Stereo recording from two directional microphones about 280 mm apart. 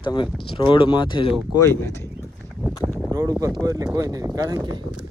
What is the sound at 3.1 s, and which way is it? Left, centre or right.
Speech, centre.